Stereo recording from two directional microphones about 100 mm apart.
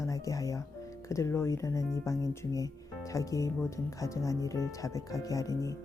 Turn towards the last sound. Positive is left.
turn(degrees=35)  # may be behind; listen again after turning